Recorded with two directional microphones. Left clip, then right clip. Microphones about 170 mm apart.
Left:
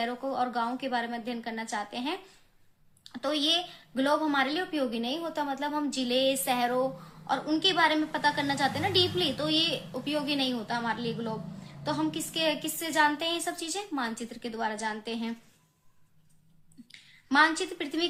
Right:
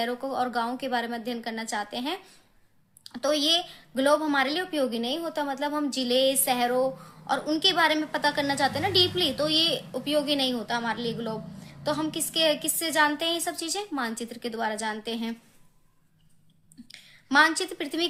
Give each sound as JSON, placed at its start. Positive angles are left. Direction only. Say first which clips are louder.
{"t": 0.0, "sound": "a woman's voice", "louder": "right 2 dB", "side_deg": -40}
{"t": 16.9, "sound": "a woman's voice", "louder": "right 4 dB", "side_deg": -40}